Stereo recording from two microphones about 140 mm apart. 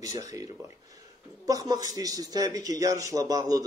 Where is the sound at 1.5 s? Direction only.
25° right (ahead or behind).